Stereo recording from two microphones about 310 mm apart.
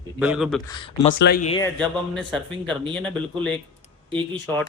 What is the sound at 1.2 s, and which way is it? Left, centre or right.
Speech, left.